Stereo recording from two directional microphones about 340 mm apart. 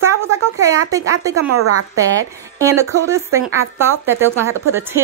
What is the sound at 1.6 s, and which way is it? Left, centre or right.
Speech, right.